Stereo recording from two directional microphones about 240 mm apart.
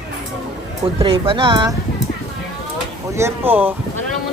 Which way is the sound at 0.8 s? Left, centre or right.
Right.